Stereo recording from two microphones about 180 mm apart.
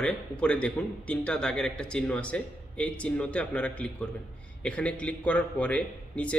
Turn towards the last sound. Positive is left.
turn(degrees=5)  # may be behind; listen again after turning